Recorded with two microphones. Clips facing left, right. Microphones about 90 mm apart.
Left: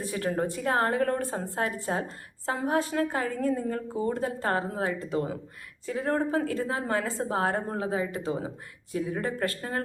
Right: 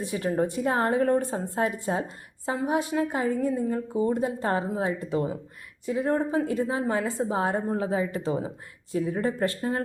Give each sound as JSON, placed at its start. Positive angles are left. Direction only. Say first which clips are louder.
{"t": 0.0, "sound": "a woman's voice", "louder": "right 3 dB", "side_deg": -20}